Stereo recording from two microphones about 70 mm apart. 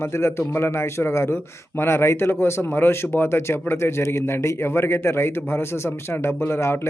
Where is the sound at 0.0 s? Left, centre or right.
Left.